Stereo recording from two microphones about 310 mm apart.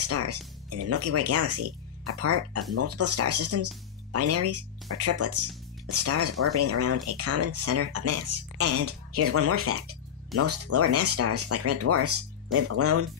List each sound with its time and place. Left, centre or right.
0.0 s speech: right